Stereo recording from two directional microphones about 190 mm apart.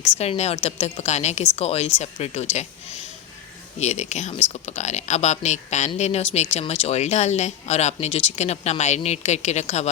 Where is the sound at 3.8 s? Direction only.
35° left (ahead or behind).